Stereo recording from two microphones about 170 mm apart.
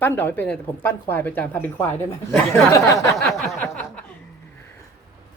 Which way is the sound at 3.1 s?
Centre (ahead or behind).